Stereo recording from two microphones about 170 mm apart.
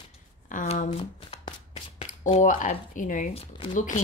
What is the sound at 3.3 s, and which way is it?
Speech, 35° left (ahead or behind).